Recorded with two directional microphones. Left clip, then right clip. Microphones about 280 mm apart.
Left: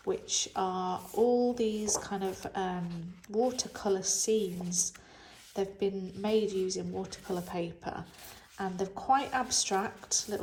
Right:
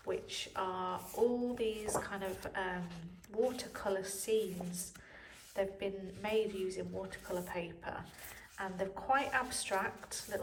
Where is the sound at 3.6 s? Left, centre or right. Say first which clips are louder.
Left 6 dB; centre.